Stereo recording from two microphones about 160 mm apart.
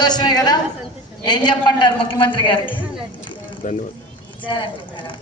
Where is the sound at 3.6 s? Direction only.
55° left (ahead or behind).